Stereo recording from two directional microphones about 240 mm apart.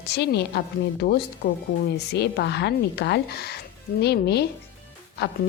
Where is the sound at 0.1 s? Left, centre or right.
Left.